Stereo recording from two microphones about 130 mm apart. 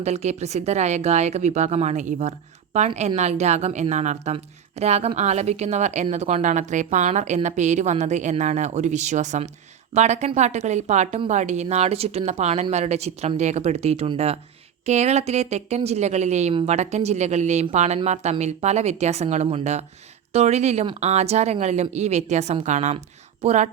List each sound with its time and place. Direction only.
0.0 s a woman's voice: 55° right (ahead or behind)